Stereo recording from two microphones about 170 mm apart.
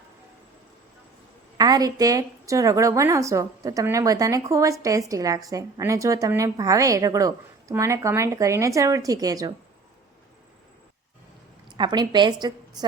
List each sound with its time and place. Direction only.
1.5 s a woman's voice: 25° right (ahead or behind)
11.8 s a woman's voice: 25° right (ahead or behind)